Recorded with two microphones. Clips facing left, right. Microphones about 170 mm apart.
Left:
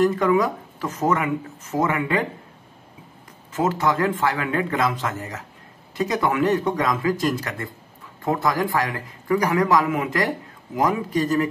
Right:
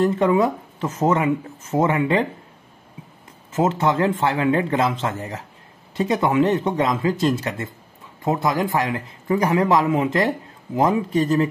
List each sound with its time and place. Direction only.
0.0 s speech: 25° right (ahead or behind)
3.5 s speech: 25° right (ahead or behind)